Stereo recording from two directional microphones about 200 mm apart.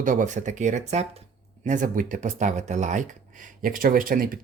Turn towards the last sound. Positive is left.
turn(degrees=-45)  # may be behind; listen again after turning